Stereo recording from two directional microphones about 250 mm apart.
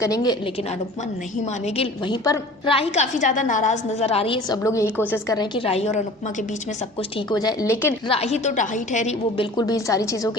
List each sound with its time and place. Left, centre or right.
0.0 s a woman's voice: centre
1.6 s a woman's voice: left
7.3 s a woman's voice: centre
8.1 s a woman's voice: left
9.6 s a woman's voice: centre